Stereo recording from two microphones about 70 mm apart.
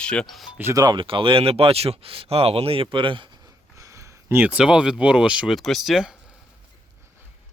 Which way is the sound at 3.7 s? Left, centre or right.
Right.